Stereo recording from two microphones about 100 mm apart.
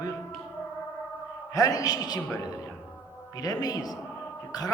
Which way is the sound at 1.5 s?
35° left (ahead or behind).